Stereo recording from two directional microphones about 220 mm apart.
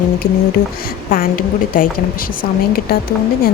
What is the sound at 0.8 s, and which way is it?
A woman's voice, 40° left (ahead or behind).